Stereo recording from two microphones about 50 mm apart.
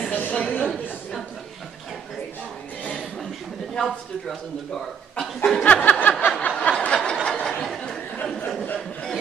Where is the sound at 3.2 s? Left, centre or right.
Centre.